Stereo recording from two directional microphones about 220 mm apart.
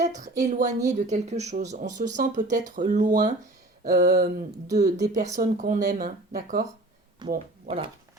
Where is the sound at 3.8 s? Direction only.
45° right (ahead or behind).